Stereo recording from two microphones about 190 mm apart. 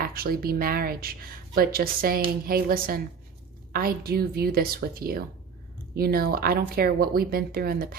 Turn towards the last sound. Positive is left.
turn(degrees=-50)  # may be behind; listen again after turning